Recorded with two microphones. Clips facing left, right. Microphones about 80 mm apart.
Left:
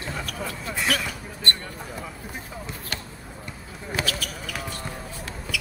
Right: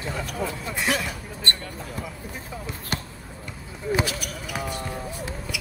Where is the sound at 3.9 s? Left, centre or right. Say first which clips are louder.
Right 3 dB; centre.